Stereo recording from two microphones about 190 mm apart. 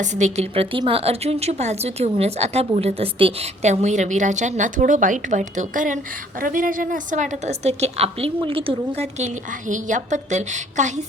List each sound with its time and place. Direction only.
0.0 s a woman's voice: 40° right (ahead or behind)